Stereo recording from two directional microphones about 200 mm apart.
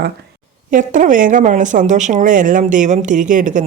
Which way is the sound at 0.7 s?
40° right (ahead or behind).